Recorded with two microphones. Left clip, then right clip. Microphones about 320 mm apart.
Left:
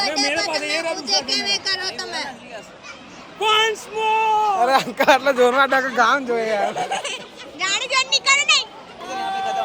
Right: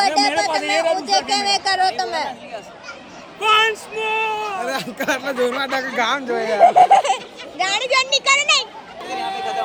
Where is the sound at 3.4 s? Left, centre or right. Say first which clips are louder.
Right 2 dB; centre.